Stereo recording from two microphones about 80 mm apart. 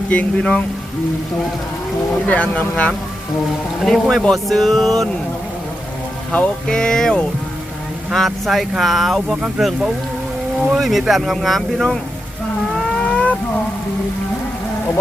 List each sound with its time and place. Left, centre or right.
0.1 s speech: centre
2.2 s speech: centre
3.8 s speech: centre
6.3 s speech: centre
12.7 s livestock: centre